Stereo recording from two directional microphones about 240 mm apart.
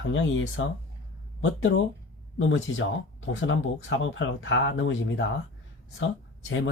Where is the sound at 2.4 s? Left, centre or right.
Left.